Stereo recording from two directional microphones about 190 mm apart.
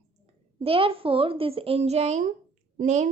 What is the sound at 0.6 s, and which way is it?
A child's voice, 30° right (ahead or behind).